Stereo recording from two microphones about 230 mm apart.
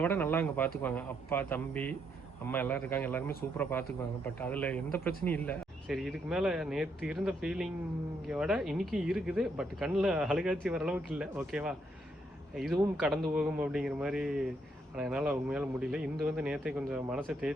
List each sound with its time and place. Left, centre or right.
0.0 s speech: centre